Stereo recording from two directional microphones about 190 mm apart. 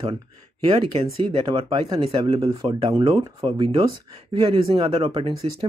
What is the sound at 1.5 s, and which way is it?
Speech, 30° right (ahead or behind).